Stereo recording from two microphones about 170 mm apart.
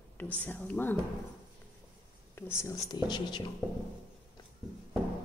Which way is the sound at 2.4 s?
15° left (ahead or behind).